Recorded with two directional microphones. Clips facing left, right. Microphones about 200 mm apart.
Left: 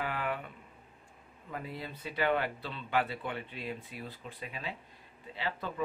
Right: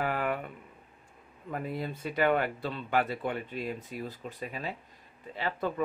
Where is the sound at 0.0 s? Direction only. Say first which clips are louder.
Right 5 dB; 45° right (ahead or behind).